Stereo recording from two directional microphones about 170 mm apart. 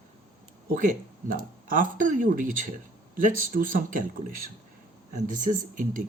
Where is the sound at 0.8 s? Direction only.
55° right (ahead or behind).